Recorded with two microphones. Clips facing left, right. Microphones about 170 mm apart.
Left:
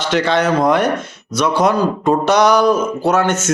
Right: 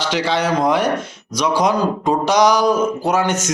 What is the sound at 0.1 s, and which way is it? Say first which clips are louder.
Speech: left 5 dB; 10° right (ahead or behind).